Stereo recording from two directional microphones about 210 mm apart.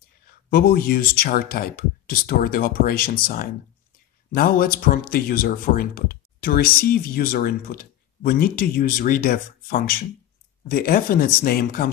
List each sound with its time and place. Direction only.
0.5 s speech: 45° left (ahead or behind)